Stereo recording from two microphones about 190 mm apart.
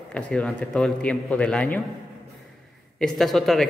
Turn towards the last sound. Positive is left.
turn(degrees=0)  # may be behind; listen again after turning